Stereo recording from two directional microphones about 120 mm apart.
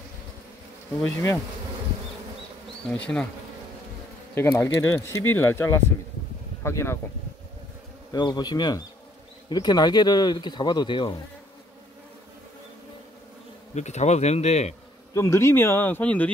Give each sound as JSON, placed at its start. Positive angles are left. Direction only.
{"t": 2.9, "sound": "bee", "side_deg": 10}
{"t": 4.4, "sound": "speech", "side_deg": 20}
{"t": 8.1, "sound": "speech", "side_deg": 35}
{"t": 13.7, "sound": "speech", "side_deg": 70}
{"t": 15.1, "sound": "speech", "side_deg": 25}